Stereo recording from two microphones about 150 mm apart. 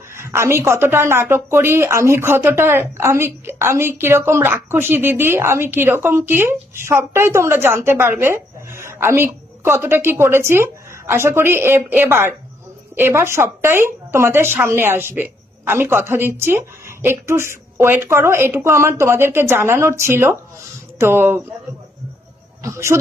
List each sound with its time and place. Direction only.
0.1 s speech: 15° right (ahead or behind)
22.6 s speech: 20° right (ahead or behind)